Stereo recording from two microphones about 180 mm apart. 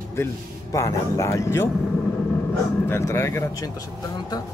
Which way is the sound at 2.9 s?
15° left (ahead or behind).